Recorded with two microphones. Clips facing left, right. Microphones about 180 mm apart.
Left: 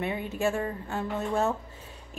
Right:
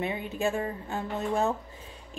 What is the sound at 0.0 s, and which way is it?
A woman's voice, 20° right (ahead or behind).